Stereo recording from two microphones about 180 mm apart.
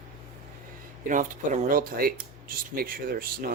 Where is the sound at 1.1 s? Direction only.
45° right (ahead or behind).